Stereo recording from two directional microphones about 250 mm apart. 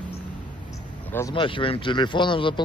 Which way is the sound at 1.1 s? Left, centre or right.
Centre.